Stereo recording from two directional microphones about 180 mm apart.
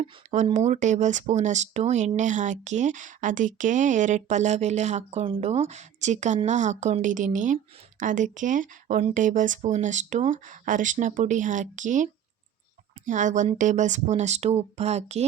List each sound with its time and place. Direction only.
0.0 s speech: 35° right (ahead or behind)
13.1 s a woman's voice: 45° right (ahead or behind)